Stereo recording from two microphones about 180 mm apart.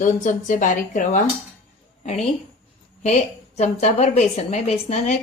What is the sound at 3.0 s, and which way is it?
Speech, 40° left (ahead or behind).